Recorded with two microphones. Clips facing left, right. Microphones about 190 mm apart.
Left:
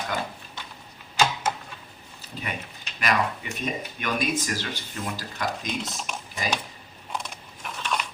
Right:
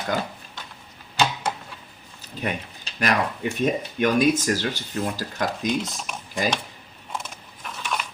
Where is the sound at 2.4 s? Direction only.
45° right (ahead or behind).